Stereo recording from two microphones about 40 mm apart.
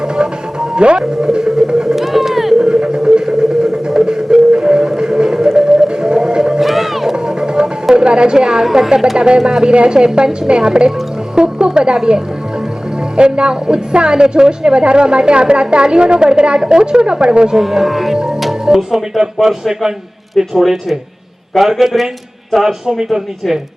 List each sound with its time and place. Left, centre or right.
0.8 s a woman's voice: right
1.2 s a sound: centre
2.6 s a sound: centre
5.5 s music: centre
6.6 s a sound: centre
7.3 s music: centre
8.6 s speech: centre
9.1 s a woman's voice: right
11.3 s music: centre
13.1 s a woman's voice: right
17.6 s speech: centre